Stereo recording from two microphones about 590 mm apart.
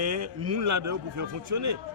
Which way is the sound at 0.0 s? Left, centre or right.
Right.